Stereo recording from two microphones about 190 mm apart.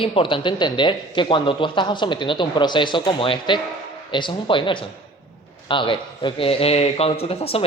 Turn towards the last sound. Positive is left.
turn(degrees=30)  # may be behind; listen again after turning